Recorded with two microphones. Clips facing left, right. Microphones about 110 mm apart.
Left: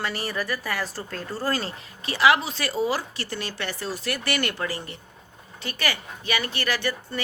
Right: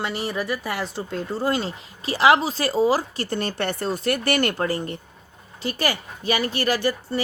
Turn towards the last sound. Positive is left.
turn(degrees=-40)  # may be behind; listen again after turning